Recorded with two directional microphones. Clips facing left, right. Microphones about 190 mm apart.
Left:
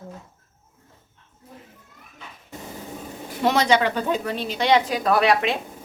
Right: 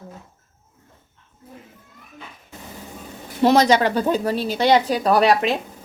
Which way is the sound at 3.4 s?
40° right (ahead or behind).